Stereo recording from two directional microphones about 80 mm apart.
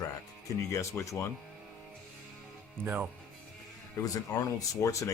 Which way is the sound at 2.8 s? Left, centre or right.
Right.